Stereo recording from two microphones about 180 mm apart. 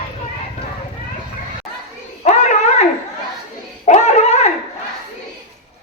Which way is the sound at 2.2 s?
40° left (ahead or behind).